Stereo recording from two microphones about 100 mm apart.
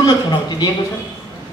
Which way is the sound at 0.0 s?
45° left (ahead or behind).